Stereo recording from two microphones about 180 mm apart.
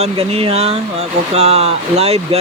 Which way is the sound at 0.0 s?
35° right (ahead or behind).